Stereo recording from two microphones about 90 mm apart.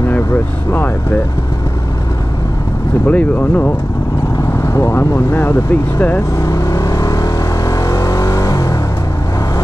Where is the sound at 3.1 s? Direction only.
15° left (ahead or behind).